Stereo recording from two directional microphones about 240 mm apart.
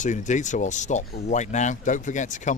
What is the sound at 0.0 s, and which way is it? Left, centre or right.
Speech, left.